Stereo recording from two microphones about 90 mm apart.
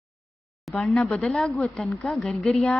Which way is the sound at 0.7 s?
5° left (ahead or behind).